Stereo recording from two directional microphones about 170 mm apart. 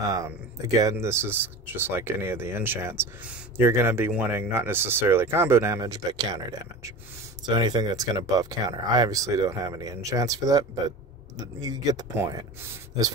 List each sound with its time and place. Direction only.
0.7 s speech: 20° right (ahead or behind)